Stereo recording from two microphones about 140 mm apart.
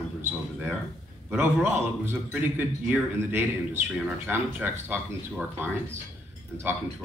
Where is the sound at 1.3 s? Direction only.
15° right (ahead or behind).